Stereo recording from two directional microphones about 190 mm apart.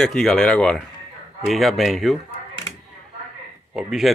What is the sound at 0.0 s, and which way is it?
Speech, centre (ahead or behind).